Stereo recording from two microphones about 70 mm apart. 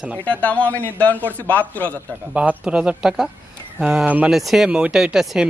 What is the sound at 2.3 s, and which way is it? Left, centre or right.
Speech, centre.